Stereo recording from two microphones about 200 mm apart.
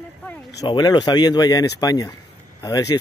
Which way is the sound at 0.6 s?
20° left (ahead or behind).